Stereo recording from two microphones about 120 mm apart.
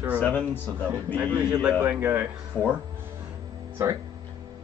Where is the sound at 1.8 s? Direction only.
20° right (ahead or behind).